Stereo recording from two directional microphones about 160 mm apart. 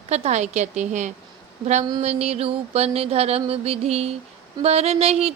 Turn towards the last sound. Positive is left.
turn(degrees=-40)  # may be behind; listen again after turning